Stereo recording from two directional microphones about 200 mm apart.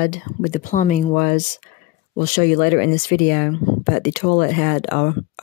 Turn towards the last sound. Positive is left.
turn(degrees=40)  # may be behind; listen again after turning